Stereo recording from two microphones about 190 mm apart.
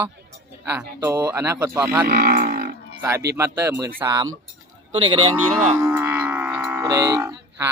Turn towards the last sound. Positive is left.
turn(degrees=-15)  # may be behind; listen again after turning